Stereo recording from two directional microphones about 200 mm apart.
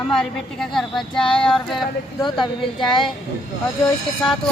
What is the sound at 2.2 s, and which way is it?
Speech, 25° left (ahead or behind).